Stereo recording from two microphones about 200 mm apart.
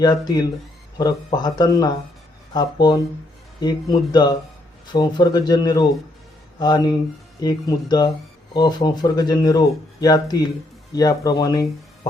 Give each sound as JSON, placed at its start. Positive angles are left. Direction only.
{"t": 0.0, "sound": "speech", "side_deg": 20}
{"t": 3.6, "sound": "speech", "side_deg": 20}